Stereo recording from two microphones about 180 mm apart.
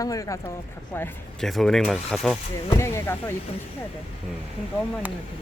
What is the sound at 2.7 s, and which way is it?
Speech, 15° left (ahead or behind).